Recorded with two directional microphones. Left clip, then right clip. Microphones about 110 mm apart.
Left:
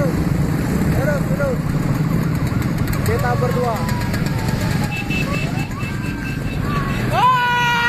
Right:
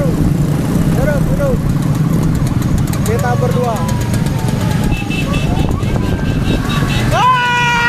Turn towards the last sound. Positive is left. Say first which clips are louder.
# right 4 dB
turn(degrees=10)  # may be behind; listen again after turning